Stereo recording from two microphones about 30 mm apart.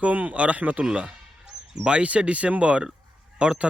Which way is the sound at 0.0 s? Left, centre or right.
Right.